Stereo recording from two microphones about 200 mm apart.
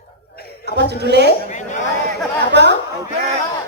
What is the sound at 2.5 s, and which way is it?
Speech, 60° right (ahead or behind).